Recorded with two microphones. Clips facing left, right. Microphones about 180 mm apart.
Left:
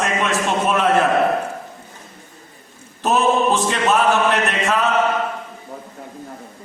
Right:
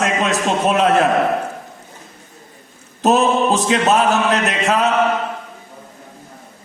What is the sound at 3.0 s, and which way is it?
Mantra, 40° right (ahead or behind).